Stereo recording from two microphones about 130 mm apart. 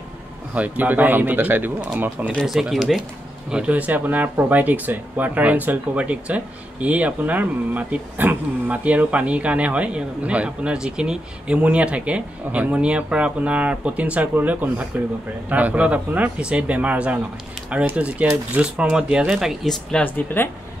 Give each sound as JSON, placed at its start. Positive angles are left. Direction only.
{"t": 0.6, "sound": "speech", "side_deg": -10}
{"t": 20.4, "sound": "speech", "side_deg": 15}